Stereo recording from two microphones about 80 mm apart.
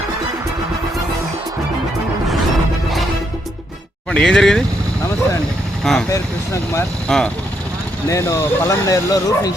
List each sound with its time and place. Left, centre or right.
4.1 s speech: centre
5.8 s speech: centre
6.1 s speech: left
7.1 s speech: centre
8.0 s speech: left